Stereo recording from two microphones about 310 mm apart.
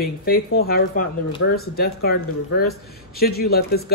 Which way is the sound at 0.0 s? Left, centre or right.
Left.